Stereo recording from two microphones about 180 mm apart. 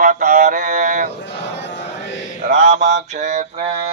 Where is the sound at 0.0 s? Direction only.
45° right (ahead or behind).